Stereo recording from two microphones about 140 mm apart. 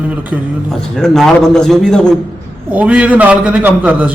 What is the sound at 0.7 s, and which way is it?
A man's voice, 5° left (ahead or behind).